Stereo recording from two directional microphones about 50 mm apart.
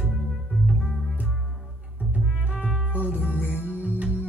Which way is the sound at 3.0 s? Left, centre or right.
Right.